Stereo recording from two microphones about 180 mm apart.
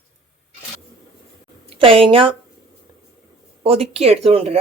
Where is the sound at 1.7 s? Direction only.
30° right (ahead or behind).